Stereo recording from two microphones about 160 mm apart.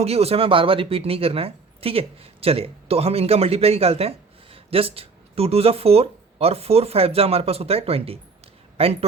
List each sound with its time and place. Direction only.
0.0 s speech: 40° right (ahead or behind)